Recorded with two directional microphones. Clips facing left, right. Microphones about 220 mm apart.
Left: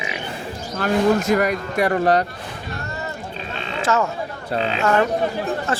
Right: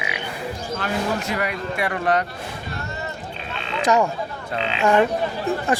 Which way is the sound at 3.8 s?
15° right (ahead or behind).